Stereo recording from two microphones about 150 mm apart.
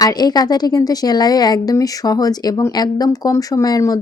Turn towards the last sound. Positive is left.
turn(degrees=25)  # may be behind; listen again after turning